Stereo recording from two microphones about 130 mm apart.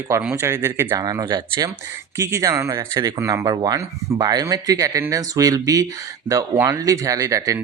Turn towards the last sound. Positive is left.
turn(degrees=-25)  # may be behind; listen again after turning